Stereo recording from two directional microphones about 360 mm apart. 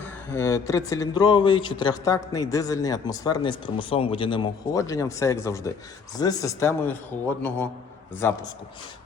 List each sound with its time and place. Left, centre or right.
0.0 s speech: centre